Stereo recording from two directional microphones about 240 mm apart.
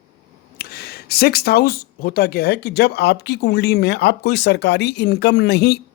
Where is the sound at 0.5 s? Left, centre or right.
Left.